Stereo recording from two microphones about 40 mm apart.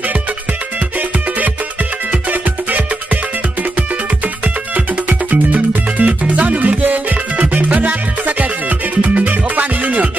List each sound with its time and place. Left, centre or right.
5.3 s music: right